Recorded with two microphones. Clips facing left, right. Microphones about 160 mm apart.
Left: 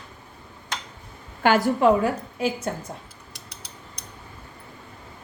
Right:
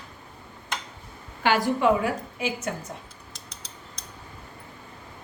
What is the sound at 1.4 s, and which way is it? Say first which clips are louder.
Speech: left 3 dB; 45° left (ahead or behind).